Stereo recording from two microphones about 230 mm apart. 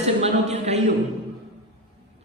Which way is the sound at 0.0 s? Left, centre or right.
Right.